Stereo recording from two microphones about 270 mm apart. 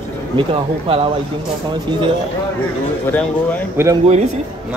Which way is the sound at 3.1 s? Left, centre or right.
Centre.